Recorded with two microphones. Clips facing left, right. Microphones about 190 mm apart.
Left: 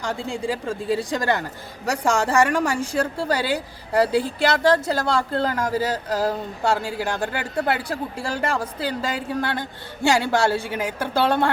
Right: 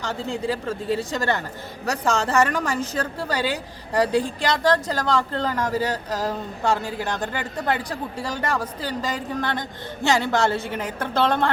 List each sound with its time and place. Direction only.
0.3 s a man's voice: 10° left (ahead or behind)